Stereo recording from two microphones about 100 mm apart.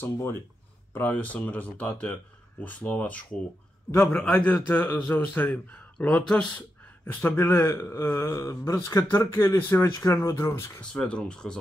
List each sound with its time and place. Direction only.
0.0 s a man's voice: 20° left (ahead or behind)
4.6 s a man's voice: 25° left (ahead or behind)
10.8 s a man's voice: 10° left (ahead or behind)